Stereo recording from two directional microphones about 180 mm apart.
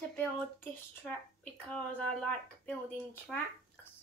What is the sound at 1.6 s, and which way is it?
Speech, 5° left (ahead or behind).